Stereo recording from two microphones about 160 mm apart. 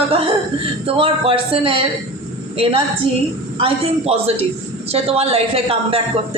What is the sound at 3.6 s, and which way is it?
A woman's voice, 40° right (ahead or behind).